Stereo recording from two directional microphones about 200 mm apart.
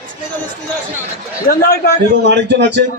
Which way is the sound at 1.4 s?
50° left (ahead or behind).